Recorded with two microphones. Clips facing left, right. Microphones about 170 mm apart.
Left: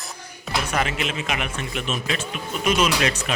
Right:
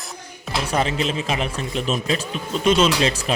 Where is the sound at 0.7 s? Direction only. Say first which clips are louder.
Right 5 dB; 30° right (ahead or behind).